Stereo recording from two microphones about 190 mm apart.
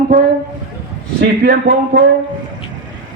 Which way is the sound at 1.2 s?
60° right (ahead or behind).